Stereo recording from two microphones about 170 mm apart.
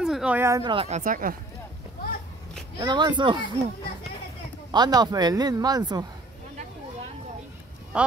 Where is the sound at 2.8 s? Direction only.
25° right (ahead or behind).